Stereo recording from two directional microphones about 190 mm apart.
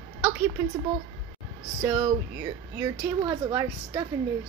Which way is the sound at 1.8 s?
15° right (ahead or behind).